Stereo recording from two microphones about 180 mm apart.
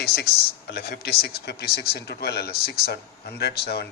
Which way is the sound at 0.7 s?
65° left (ahead or behind).